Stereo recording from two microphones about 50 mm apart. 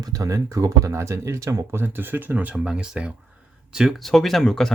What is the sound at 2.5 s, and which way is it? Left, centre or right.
Speech, centre.